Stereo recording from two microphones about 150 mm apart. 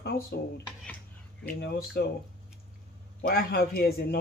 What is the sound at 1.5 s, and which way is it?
Speech, 85° left.